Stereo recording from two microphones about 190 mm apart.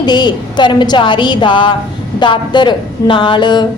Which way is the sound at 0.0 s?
25° left (ahead or behind).